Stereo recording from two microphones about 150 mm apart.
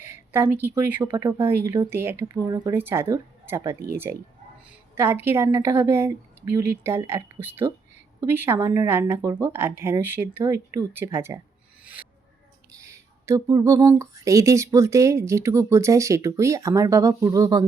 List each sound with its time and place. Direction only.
0.0 s speech: 15° right (ahead or behind)
12.7 s speech: 20° right (ahead or behind)